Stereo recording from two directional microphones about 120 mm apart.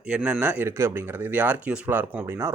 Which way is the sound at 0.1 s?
15° right (ahead or behind).